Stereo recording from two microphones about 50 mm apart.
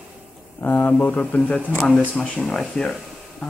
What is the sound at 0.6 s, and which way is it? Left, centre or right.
Speech, left.